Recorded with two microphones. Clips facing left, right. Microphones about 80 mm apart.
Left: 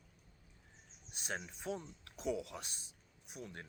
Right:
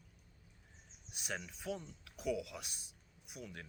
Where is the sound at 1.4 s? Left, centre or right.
Left.